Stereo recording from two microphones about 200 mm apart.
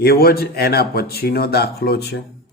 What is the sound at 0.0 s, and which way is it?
A man's voice, 50° left (ahead or behind).